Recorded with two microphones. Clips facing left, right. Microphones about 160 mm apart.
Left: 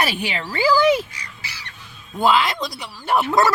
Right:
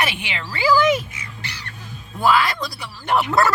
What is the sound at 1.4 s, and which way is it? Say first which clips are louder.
Crow: right 5 dB; centre (ahead or behind).